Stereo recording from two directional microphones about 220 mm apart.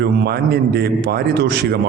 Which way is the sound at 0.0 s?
45° right (ahead or behind).